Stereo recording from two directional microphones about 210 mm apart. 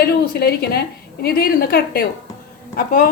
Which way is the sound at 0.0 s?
50° left (ahead or behind).